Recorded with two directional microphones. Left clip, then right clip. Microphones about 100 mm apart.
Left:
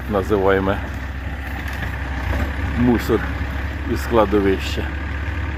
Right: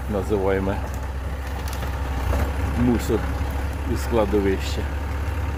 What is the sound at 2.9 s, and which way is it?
Speech, centre (ahead or behind).